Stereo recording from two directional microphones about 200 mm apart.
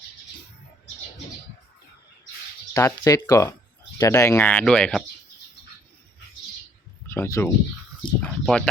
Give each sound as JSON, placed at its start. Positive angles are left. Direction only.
{"t": 2.7, "sound": "speech", "side_deg": 15}
{"t": 7.1, "sound": "speech", "side_deg": 10}